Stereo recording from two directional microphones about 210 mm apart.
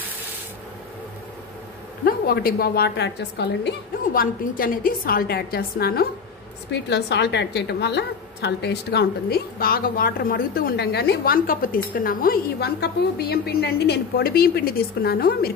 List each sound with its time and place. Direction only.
2.0 s a woman's voice: 45° left (ahead or behind)